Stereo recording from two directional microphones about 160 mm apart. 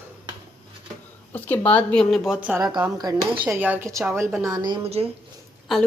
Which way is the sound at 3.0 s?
25° right (ahead or behind).